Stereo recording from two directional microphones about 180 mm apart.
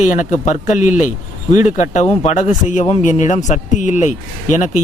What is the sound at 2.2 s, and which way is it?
A man's voice, 45° left (ahead or behind).